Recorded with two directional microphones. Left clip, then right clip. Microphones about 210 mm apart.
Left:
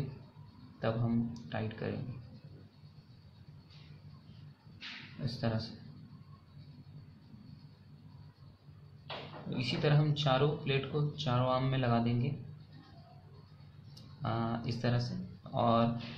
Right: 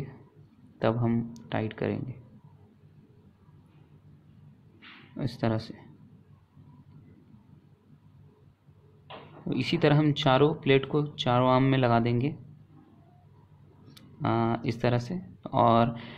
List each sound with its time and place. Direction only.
0.7 s speech: 45° right (ahead or behind)
5.2 s speech: 40° right (ahead or behind)
9.6 s speech: 40° right (ahead or behind)
14.2 s speech: 40° right (ahead or behind)